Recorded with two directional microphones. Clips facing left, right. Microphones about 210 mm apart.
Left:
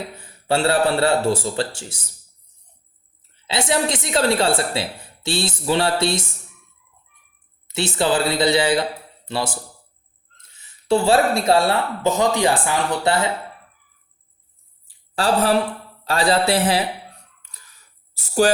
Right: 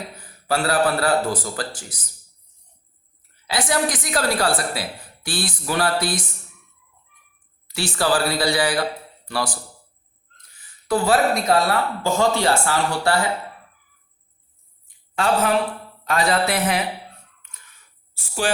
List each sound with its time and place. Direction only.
0.2 s a woman's voice: 25° left (ahead or behind)
3.3 s a woman's voice: 25° left (ahead or behind)
7.7 s a man's voice: 20° left (ahead or behind)
14.8 s a sound: 35° left (ahead or behind)
16.0 s a man's voice: 30° left (ahead or behind)
17.4 s a sound: 35° left (ahead or behind)